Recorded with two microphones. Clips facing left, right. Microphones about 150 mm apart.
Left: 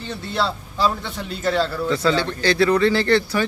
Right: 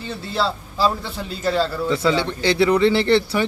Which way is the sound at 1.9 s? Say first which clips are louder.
Even; 20° right (ahead or behind).